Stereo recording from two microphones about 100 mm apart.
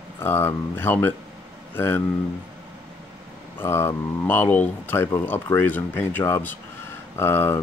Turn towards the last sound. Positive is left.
turn(degrees=25)  # may be behind; listen again after turning